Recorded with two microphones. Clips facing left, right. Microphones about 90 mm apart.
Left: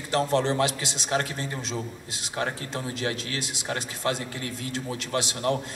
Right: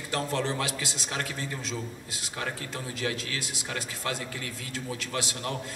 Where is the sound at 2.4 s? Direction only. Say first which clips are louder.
Left 5 dB; 35° left (ahead or behind).